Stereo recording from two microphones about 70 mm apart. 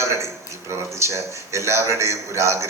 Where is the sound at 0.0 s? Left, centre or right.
Right.